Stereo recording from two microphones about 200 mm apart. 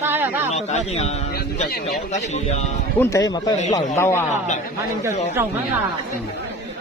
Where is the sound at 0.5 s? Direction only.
30° left (ahead or behind).